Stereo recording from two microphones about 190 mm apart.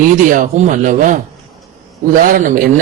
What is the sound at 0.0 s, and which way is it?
A man's voice, 45° right (ahead or behind).